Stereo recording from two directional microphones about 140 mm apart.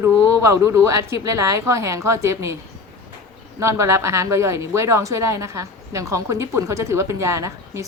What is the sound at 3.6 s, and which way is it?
A woman's voice, 20° right (ahead or behind).